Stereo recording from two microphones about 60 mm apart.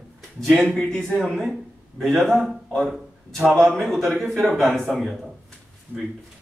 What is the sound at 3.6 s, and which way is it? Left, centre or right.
A man's voice, centre.